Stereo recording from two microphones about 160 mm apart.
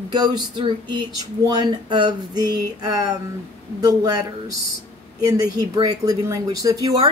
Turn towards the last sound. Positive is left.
turn(degrees=-20)  # may be behind; listen again after turning